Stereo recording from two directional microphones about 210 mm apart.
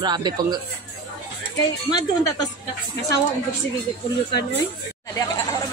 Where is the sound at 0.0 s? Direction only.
20° right (ahead or behind).